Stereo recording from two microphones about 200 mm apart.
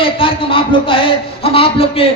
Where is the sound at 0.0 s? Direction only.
25° left (ahead or behind).